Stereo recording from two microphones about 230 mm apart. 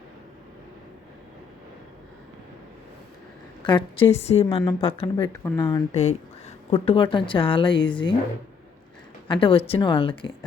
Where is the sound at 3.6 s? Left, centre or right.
Left.